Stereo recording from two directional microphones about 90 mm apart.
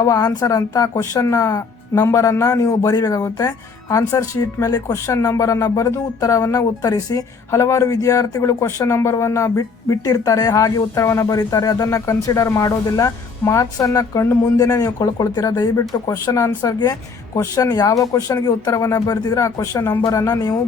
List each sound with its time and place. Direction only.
0.0 s speech: 40° left (ahead or behind)